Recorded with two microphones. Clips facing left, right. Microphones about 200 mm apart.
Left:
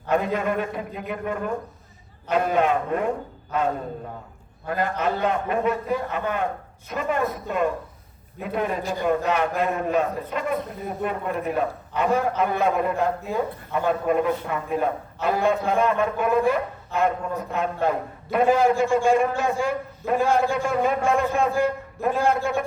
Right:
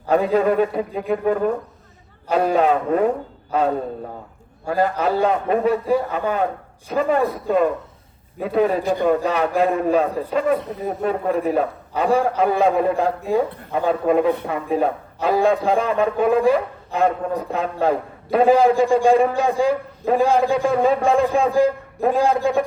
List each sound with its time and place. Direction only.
0.1 s a man's voice: 35° right (ahead or behind)
4.6 s a man's voice: 30° right (ahead or behind)
8.8 s speech: 60° right (ahead or behind)
9.2 s a man's voice: 35° right (ahead or behind)